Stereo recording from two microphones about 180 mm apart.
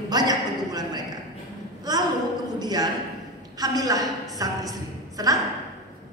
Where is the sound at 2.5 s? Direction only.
20° right (ahead or behind).